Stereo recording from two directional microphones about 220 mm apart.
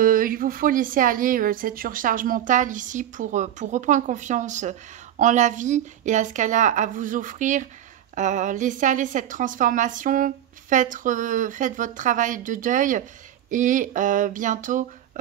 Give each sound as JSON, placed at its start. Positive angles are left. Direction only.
{"t": 0.0, "sound": "a woman's voice", "side_deg": -40}